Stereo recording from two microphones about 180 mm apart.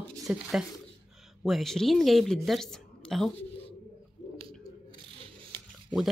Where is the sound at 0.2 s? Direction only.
Centre (ahead or behind).